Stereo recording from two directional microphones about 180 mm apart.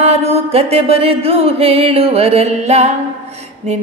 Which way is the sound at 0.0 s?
35° right (ahead or behind).